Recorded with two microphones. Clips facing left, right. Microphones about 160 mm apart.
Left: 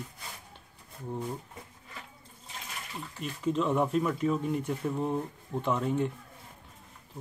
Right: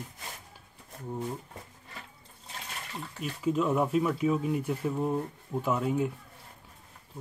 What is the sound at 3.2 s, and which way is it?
Speech, 5° right (ahead or behind).